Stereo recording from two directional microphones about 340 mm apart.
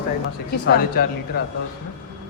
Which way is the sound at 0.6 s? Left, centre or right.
Left.